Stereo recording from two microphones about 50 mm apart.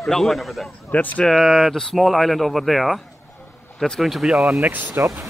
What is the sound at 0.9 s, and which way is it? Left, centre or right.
Speech, left.